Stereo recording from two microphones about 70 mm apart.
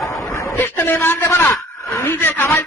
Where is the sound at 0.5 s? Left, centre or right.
Left.